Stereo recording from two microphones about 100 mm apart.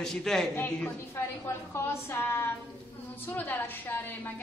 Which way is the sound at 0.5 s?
20° left (ahead or behind).